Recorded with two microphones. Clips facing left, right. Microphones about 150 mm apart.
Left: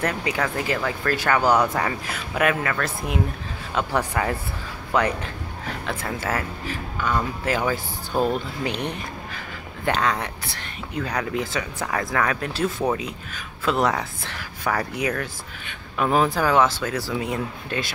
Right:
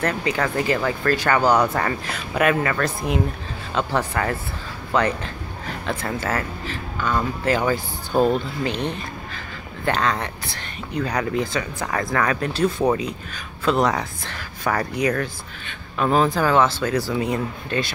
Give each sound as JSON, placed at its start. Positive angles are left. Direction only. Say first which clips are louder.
{"t": 0.0, "sound": "speech", "louder": "right 2 dB", "side_deg": 10}
{"t": 8.6, "sound": "speech", "louder": "right 2 dB", "side_deg": 15}